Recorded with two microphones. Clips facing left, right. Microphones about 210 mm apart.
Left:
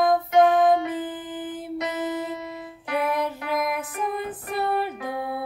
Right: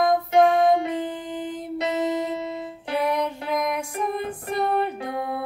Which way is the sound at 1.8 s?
25° right (ahead or behind).